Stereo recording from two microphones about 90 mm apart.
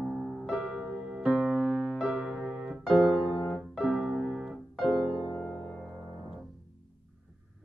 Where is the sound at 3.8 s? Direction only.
5° right (ahead or behind).